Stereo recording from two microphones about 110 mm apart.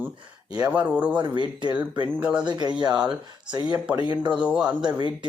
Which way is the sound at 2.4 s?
45° right (ahead or behind).